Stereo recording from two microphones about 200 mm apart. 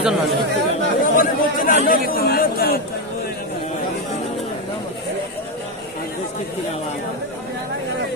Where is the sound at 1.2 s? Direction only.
45° left (ahead or behind).